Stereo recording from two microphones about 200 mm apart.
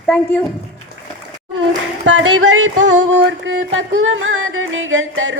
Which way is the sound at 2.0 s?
80° right.